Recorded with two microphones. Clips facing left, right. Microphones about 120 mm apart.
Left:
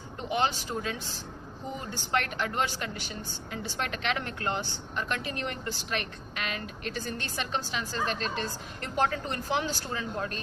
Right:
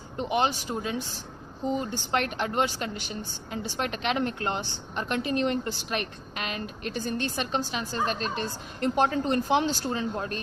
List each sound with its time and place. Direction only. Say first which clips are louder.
0.2 s a woman's voice: right 3 dB; 20° right (ahead or behind)